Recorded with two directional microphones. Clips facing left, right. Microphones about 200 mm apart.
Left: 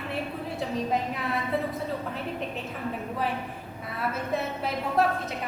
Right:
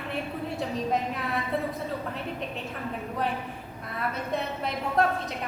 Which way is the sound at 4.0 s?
5° left (ahead or behind).